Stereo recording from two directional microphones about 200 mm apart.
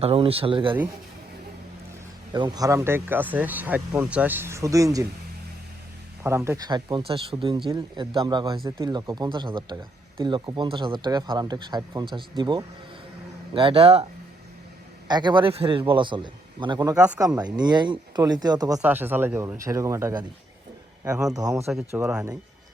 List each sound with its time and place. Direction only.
0.0 s a man's voice: 30° right (ahead or behind)
2.3 s speech: 20° right (ahead or behind)
6.2 s a man's voice: 15° right (ahead or behind)
18.8 s speech: 10° right (ahead or behind)
21.2 s speech: 15° right (ahead or behind)
21.7 s speech: 5° right (ahead or behind)